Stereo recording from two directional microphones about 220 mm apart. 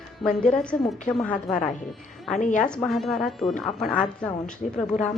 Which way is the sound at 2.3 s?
35° left (ahead or behind).